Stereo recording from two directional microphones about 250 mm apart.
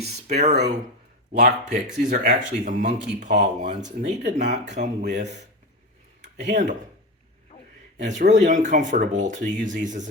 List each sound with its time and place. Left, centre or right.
0.0 s speech: right
6.5 s speech: right
8.0 s speech: right